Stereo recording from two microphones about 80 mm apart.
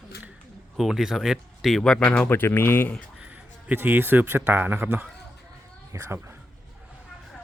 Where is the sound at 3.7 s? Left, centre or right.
Centre.